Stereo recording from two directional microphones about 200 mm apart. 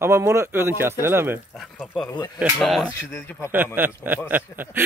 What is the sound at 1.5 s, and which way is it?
A man's voice, centre (ahead or behind).